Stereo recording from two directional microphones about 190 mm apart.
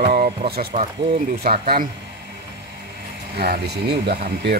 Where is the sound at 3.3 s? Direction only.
55° right (ahead or behind).